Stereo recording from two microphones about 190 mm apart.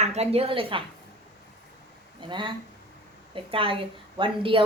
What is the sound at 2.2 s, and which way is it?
Speech, 25° right (ahead or behind).